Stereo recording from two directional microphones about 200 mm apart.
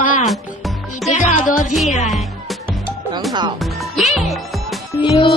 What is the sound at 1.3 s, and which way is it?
Speech, 40° left (ahead or behind).